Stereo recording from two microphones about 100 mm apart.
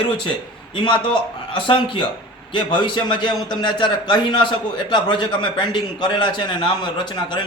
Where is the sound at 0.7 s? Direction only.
55° left (ahead or behind).